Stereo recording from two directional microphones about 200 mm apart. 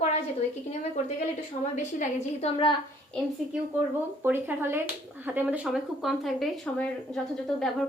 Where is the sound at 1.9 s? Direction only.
35° left (ahead or behind).